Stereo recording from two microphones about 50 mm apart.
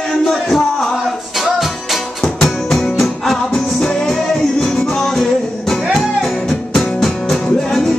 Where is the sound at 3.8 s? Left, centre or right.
Left.